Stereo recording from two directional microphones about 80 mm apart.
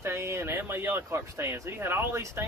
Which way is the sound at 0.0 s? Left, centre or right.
Right.